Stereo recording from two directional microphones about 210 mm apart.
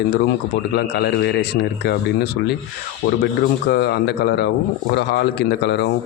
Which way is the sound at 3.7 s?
55° left (ahead or behind).